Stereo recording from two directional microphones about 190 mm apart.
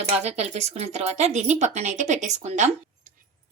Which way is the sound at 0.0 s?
35° right (ahead or behind).